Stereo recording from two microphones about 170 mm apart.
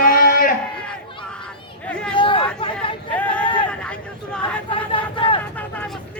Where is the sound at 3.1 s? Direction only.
10° left (ahead or behind).